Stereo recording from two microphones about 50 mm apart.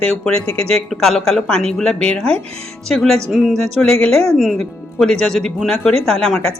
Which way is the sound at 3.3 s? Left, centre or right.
Centre.